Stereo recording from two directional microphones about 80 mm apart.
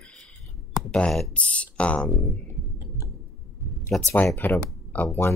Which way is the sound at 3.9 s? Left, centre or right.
Centre.